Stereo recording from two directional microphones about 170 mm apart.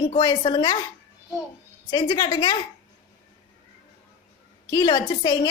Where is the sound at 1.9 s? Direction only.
25° left (ahead or behind).